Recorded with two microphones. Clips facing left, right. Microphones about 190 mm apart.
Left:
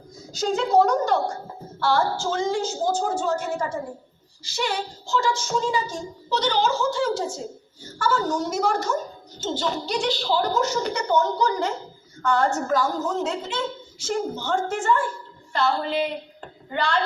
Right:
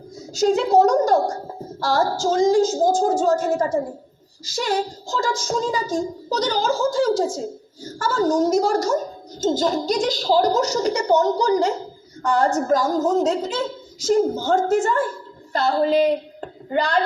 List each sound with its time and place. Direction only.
0.4 s a woman's voice: 35° right (ahead or behind)
7.1 s a woman's voice: 90° right
7.9 s a woman's voice: 40° right (ahead or behind)